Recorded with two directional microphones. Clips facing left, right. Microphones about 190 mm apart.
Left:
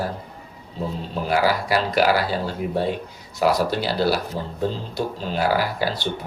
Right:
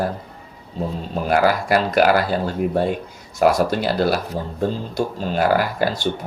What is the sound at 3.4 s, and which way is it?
Speech, 50° right (ahead or behind).